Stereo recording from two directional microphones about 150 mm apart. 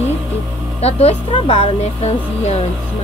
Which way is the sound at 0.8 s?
45° left (ahead or behind).